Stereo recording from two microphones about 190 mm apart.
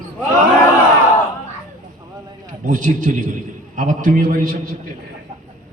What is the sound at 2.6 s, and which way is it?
A man's voice, 45° right (ahead or behind).